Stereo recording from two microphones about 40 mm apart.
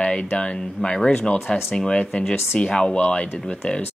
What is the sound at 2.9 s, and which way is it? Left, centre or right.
Speech, left.